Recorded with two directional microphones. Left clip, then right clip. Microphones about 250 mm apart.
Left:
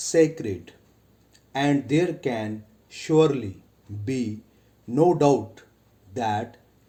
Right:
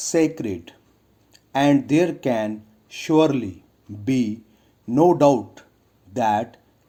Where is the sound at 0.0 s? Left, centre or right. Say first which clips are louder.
Even; right.